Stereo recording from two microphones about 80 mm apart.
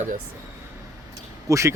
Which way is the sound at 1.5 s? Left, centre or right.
Right.